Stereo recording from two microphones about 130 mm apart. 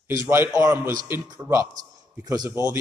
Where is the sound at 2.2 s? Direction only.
30° right (ahead or behind).